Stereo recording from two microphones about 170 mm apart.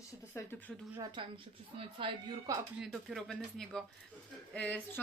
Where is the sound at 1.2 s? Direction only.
30° right (ahead or behind).